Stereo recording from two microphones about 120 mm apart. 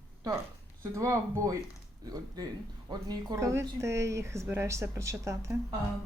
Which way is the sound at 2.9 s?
30° right (ahead or behind).